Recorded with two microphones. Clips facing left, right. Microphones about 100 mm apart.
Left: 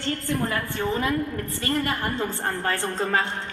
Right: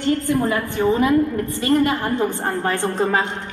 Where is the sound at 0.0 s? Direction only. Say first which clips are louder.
Right 8 dB; 15° right (ahead or behind).